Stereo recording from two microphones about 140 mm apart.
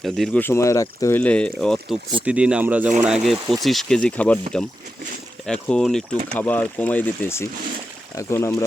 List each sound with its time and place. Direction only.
0.3 s speech: 15° left (ahead or behind)
1.2 s speech: 10° left (ahead or behind)
5.5 s speech: 5° left (ahead or behind)